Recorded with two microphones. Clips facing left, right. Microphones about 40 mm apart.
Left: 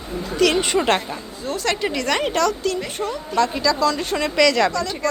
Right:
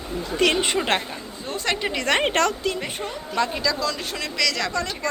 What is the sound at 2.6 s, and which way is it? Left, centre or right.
A woman's voice, centre.